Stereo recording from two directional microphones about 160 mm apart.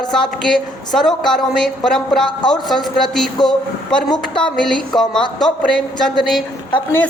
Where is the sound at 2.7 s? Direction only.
5° left (ahead or behind).